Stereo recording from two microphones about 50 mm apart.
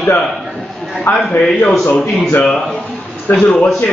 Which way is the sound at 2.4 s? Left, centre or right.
Centre.